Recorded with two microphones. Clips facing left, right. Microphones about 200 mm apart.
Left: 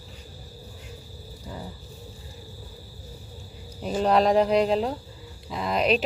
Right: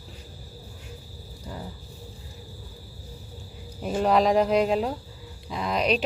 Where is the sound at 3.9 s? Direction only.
Centre (ahead or behind).